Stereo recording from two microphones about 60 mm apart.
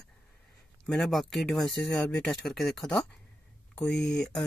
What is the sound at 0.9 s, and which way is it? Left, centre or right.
Speech, centre.